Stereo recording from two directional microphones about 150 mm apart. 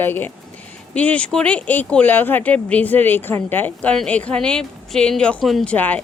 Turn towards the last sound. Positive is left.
turn(degrees=10)  # may be behind; listen again after turning